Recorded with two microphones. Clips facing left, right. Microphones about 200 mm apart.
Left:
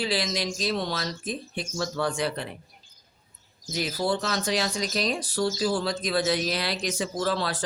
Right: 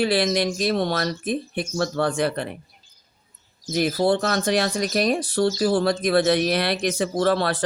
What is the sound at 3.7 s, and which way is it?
Speech, 55° right (ahead or behind).